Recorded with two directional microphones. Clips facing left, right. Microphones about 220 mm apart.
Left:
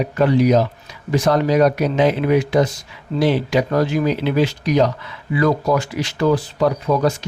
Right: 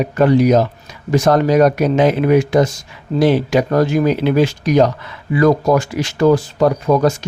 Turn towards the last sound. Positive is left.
turn(degrees=-45)  # may be behind; listen again after turning